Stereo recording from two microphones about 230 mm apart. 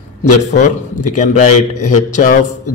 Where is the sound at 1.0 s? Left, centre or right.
Left.